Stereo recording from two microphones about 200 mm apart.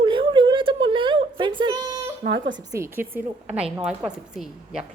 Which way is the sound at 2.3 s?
65° right (ahead or behind).